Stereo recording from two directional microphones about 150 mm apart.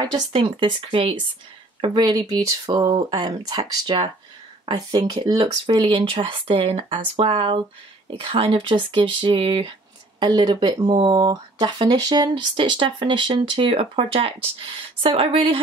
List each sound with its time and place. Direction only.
0.0 s speech: 30° right (ahead or behind)